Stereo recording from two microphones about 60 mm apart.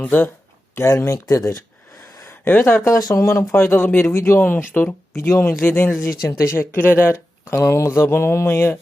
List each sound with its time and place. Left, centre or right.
0.0 s speech: left
0.9 s speech: left
2.4 s speech: left
3.1 s music: left
3.5 s speech: left
5.1 s speech: left
6.2 s music: left
6.7 s speech: left
7.6 s music: left
8.0 s music: left